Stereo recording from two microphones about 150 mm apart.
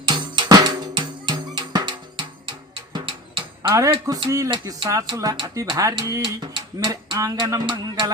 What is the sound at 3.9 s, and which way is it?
Speech, 35° right (ahead or behind).